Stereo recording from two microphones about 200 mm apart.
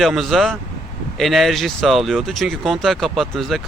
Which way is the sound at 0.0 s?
Centre (ahead or behind).